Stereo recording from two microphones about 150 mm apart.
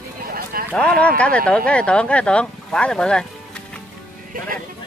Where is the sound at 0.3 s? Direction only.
85° right.